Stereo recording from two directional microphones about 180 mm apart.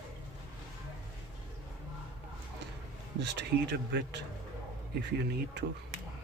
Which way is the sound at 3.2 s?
70° right (ahead or behind).